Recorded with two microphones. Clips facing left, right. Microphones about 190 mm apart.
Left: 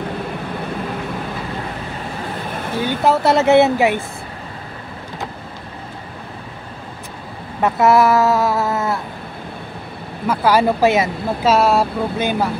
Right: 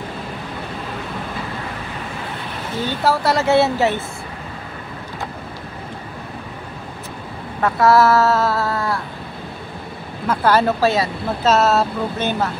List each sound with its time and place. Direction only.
2.8 s speech: 15° left (ahead or behind)
7.6 s speech: 20° left (ahead or behind)
10.2 s speech: 10° left (ahead or behind)